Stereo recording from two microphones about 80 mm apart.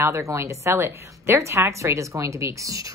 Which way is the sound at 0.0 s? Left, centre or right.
Right.